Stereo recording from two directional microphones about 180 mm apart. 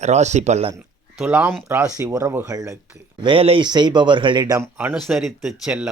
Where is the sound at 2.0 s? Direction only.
20° right (ahead or behind).